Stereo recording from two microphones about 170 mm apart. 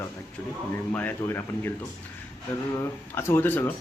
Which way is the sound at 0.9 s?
10° left (ahead or behind).